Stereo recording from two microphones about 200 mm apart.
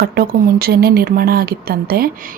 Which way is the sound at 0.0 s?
50° right (ahead or behind).